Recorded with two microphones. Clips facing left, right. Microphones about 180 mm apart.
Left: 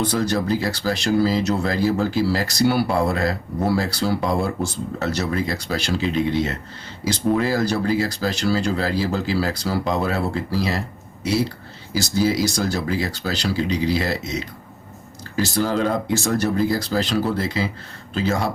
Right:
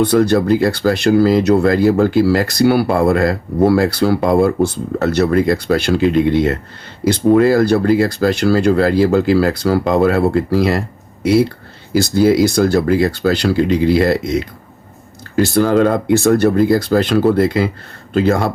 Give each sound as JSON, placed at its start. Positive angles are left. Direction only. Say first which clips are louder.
{"t": 0.0, "sound": "speech", "louder": "right 9 dB", "side_deg": -60}